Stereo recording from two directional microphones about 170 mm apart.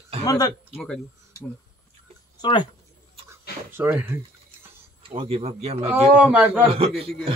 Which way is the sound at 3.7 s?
10° right (ahead or behind).